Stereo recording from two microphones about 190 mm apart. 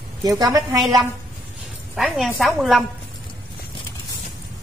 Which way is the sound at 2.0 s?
Centre (ahead or behind).